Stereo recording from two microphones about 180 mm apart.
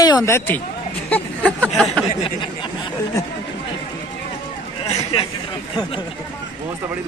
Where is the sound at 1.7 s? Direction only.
Centre (ahead or behind).